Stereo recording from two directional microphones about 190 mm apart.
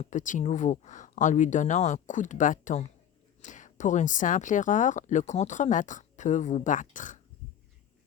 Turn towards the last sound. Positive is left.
turn(degrees=45)  # may be behind; listen again after turning